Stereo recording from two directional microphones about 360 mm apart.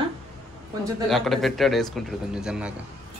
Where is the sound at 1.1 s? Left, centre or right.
Centre.